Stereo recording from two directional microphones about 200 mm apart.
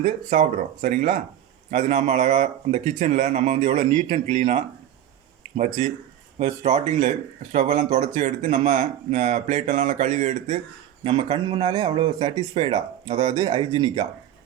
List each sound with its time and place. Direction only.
0.3 s speech: 40° right (ahead or behind)
11.0 s a man's voice: 25° right (ahead or behind)